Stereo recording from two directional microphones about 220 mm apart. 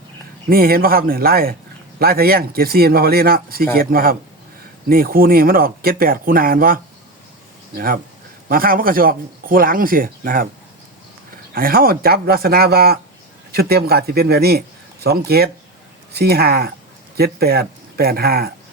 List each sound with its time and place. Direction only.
0.5 s speech: 45° right (ahead or behind)
8.4 s speech: 40° right (ahead or behind)
11.5 s speech: 40° right (ahead or behind)